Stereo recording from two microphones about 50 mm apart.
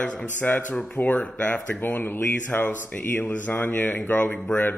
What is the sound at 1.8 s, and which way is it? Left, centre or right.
Speech, left.